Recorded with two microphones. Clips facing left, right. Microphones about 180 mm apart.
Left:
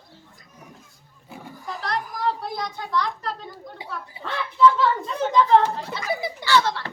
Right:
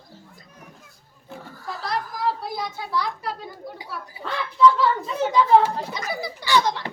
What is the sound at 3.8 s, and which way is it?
Dog, 10° right (ahead or behind).